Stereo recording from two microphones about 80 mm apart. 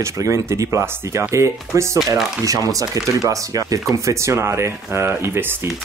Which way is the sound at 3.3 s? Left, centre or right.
Right.